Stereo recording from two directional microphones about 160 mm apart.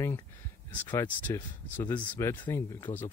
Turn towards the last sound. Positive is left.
turn(degrees=15)  # may be behind; listen again after turning